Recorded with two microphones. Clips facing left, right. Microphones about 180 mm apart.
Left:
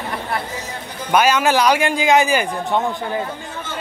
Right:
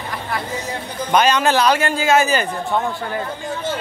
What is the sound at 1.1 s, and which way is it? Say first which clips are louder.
A man's voice: even; 10° left (ahead or behind).